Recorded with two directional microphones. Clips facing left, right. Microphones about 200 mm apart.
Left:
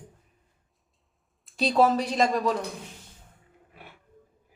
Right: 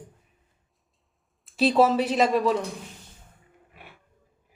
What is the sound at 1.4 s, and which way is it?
Speech, 5° right (ahead or behind).